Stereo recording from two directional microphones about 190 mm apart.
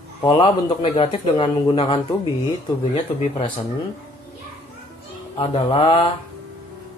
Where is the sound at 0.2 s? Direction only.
25° left (ahead or behind).